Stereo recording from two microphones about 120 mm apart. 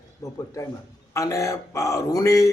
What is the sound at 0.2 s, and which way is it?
Speech, 25° left (ahead or behind).